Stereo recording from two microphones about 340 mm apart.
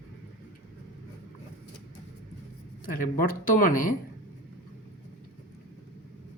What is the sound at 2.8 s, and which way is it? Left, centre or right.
Speech, left.